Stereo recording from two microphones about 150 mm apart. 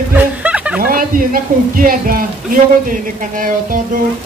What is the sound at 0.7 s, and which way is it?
A man's voice, 75° right (ahead or behind).